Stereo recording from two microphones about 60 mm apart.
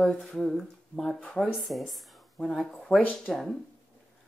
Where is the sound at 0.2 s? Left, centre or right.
Centre.